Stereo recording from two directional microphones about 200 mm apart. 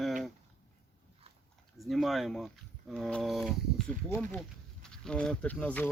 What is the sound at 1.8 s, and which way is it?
Speech, centre (ahead or behind).